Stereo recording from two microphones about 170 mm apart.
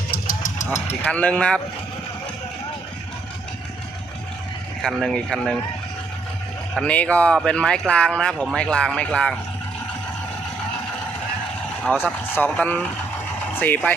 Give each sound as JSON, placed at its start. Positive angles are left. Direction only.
{"t": 0.1, "sound": "vehicle", "side_deg": 55}
{"t": 1.0, "sound": "speech", "side_deg": 10}
{"t": 4.8, "sound": "speech", "side_deg": 0}
{"t": 6.7, "sound": "speech", "side_deg": 5}
{"t": 11.9, "sound": "speech", "side_deg": 10}